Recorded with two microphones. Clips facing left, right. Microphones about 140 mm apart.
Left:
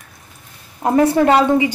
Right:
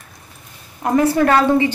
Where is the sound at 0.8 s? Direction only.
25° left (ahead or behind).